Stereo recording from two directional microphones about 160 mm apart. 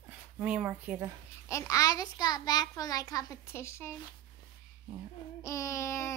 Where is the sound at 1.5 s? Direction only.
20° left (ahead or behind).